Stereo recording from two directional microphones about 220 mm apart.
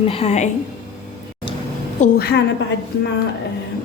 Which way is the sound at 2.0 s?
45° left (ahead or behind).